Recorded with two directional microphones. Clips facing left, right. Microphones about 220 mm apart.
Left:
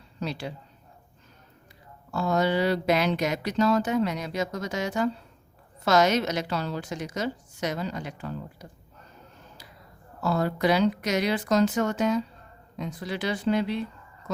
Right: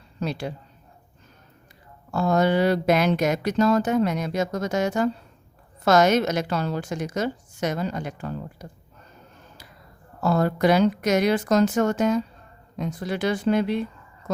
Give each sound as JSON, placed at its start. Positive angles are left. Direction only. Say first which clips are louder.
{"t": 0.2, "sound": "speech", "louder": "right 4 dB", "side_deg": -50}
{"t": 2.1, "sound": "speech", "louder": "right 4 dB", "side_deg": -50}
{"t": 10.2, "sound": "speech", "louder": "right 4 dB", "side_deg": -50}